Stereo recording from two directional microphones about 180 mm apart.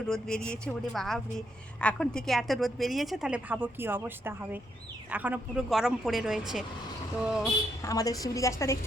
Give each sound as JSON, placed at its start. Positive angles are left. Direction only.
{"t": 0.0, "sound": "a woman's voice", "side_deg": 5}
{"t": 7.8, "sound": "a woman's voice", "side_deg": 20}